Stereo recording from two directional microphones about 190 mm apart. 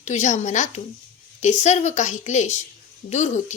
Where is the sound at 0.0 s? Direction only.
40° left (ahead or behind).